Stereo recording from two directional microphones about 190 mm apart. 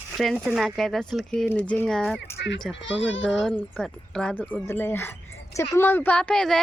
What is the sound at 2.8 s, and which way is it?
Speech, 75° left (ahead or behind).